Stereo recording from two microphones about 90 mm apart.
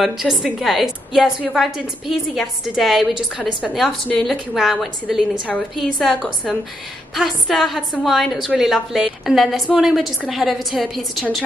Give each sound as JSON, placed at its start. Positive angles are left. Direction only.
{"t": 0.0, "sound": "a woman's voice", "side_deg": -5}